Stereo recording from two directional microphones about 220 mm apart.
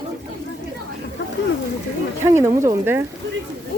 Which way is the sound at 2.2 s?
10° right (ahead or behind).